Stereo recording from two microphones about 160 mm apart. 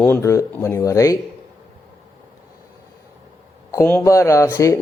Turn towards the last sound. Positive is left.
turn(degrees=20)  # may be behind; listen again after turning